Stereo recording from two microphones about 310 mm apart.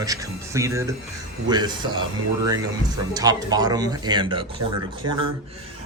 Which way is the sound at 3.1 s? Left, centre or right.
Centre.